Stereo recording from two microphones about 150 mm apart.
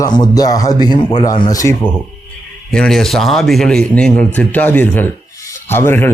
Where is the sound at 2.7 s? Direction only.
5° left (ahead or behind).